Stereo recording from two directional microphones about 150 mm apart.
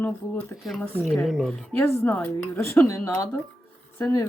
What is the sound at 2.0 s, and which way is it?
Speech, 10° left (ahead or behind).